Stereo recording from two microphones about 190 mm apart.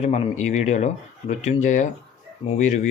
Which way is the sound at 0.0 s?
35° left (ahead or behind).